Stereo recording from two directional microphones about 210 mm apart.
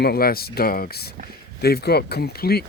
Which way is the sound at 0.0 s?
45° left (ahead or behind).